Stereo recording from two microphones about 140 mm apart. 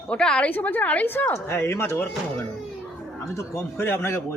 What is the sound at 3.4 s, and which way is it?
Speech, 15° left (ahead or behind).